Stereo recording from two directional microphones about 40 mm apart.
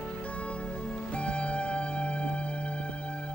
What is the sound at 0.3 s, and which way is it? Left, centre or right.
Music, left.